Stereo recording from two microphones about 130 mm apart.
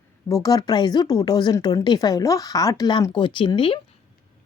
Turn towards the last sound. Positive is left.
turn(degrees=40)  # may be behind; listen again after turning